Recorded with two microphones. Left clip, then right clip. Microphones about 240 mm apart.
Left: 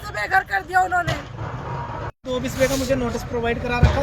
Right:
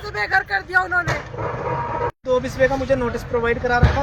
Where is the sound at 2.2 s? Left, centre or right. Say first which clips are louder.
Right 3 dB; centre.